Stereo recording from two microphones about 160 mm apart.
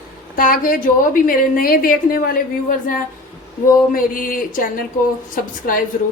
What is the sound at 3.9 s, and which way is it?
Speech, 60° left (ahead or behind).